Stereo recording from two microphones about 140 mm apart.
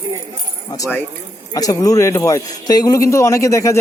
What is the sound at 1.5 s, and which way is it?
A man's voice, 25° left (ahead or behind).